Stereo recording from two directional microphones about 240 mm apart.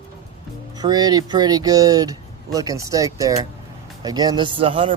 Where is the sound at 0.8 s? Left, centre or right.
Centre.